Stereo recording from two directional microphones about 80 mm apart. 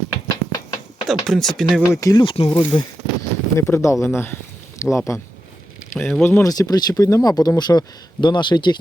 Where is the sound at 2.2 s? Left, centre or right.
Left.